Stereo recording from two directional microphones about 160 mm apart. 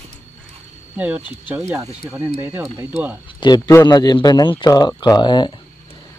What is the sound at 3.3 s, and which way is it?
A man's voice, 25° left (ahead or behind).